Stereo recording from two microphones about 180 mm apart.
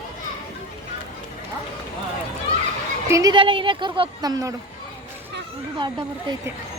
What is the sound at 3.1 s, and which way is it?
Speech, 20° right (ahead or behind).